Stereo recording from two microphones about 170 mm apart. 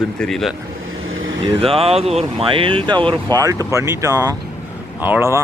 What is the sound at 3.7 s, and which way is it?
Speech, 15° right (ahead or behind).